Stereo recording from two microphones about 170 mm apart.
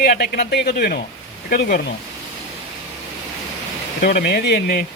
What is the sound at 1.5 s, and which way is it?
Speech, 65° left (ahead or behind).